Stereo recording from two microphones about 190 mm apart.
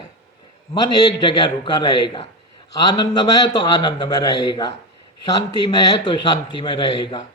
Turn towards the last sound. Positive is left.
turn(degrees=20)  # may be behind; listen again after turning